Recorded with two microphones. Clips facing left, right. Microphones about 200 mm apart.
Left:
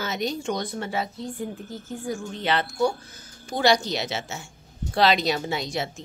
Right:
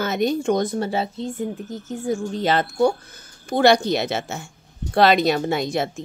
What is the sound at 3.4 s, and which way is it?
A woman's voice, 55° right (ahead or behind).